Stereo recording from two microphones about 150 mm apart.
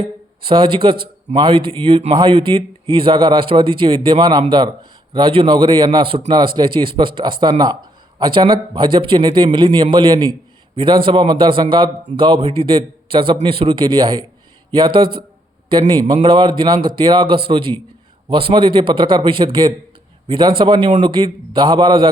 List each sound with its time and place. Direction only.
0.0 s a man's voice: 35° right (ahead or behind)